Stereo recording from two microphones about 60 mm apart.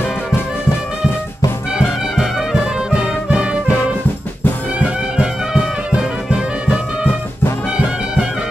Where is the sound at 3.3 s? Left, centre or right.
Centre.